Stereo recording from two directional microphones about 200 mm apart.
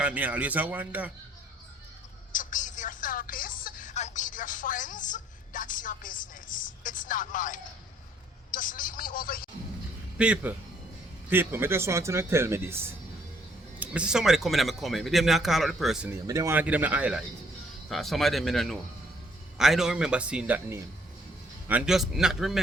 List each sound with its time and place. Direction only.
0.0 s speech: 5° right (ahead or behind)
2.3 s a sound: 40° left (ahead or behind)
8.4 s speech: 40° left (ahead or behind)
10.2 s speech: 5° right (ahead or behind)